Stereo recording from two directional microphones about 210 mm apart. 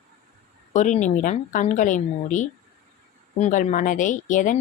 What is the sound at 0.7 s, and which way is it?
Speech, 35° left (ahead or behind).